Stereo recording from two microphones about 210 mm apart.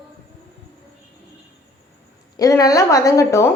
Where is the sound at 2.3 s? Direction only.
15° left (ahead or behind).